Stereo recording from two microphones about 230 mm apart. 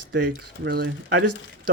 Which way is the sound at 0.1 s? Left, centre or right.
Right.